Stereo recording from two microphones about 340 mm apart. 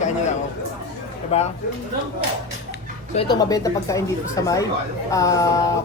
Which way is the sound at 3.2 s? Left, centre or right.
Centre.